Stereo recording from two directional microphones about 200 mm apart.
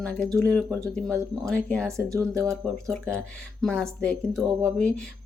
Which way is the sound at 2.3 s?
5° left (ahead or behind).